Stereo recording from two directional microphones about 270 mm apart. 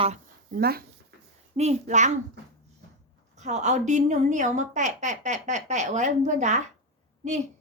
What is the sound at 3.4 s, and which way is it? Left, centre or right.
A woman's voice, right.